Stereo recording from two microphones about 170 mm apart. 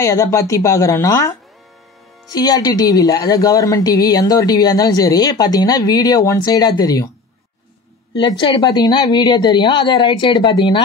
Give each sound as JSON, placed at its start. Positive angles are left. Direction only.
{"t": 0.0, "sound": "a woman's voice", "side_deg": 20}
{"t": 2.3, "sound": "a woman's voice", "side_deg": 25}
{"t": 8.2, "sound": "a woman's voice", "side_deg": 25}